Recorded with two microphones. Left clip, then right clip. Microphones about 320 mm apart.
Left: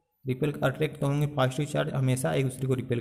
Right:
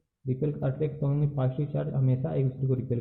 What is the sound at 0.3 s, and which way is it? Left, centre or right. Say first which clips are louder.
A man's voice: left 3 dB; left.